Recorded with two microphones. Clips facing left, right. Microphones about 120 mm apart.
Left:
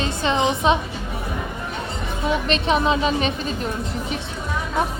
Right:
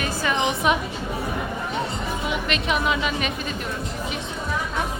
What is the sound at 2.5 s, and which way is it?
A woman's voice, 30° left (ahead or behind).